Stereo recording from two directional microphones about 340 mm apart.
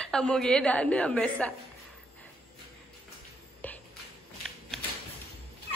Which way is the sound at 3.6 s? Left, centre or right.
Centre.